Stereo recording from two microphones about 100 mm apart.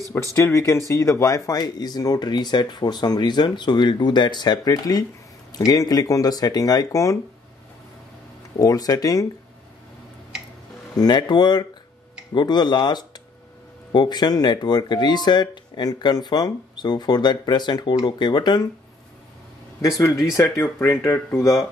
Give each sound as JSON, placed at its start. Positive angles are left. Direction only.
{"t": 0.1, "sound": "speech", "side_deg": 30}
{"t": 8.5, "sound": "speech", "side_deg": 35}
{"t": 11.0, "sound": "speech", "side_deg": 45}
{"t": 20.5, "sound": "speech", "side_deg": 25}